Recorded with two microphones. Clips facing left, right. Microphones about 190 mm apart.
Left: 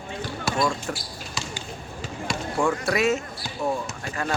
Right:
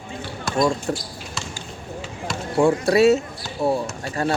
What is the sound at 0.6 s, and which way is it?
Speech, 30° right (ahead or behind).